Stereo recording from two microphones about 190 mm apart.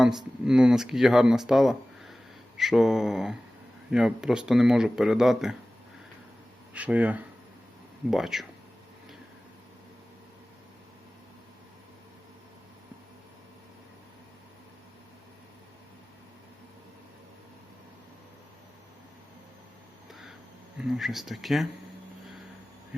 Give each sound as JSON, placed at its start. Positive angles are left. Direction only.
{"t": 0.0, "sound": "speech", "side_deg": 0}
{"t": 6.7, "sound": "speech", "side_deg": -10}
{"t": 20.7, "sound": "speech", "side_deg": 0}